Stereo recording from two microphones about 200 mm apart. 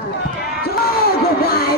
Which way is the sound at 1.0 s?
50° left (ahead or behind).